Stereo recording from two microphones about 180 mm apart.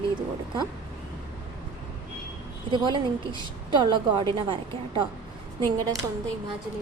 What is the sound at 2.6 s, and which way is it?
A woman's voice, 25° right (ahead or behind).